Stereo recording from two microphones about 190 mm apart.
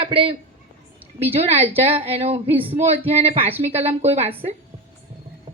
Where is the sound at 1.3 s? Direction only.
35° right (ahead or behind).